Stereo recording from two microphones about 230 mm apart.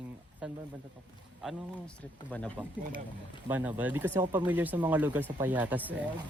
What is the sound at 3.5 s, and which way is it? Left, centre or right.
Speech, centre.